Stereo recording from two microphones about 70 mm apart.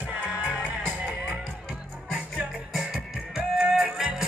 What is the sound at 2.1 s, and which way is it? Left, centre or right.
Music, centre.